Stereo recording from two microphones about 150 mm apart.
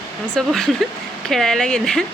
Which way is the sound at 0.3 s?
5° left (ahead or behind).